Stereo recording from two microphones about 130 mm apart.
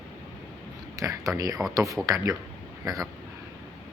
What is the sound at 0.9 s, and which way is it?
Speech, 25° right (ahead or behind).